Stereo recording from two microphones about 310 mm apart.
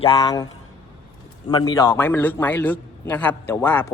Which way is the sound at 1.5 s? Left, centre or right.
Centre.